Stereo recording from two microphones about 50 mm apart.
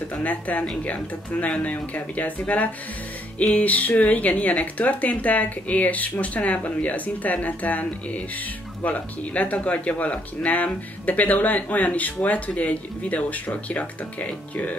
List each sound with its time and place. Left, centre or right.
0.1 s speech: left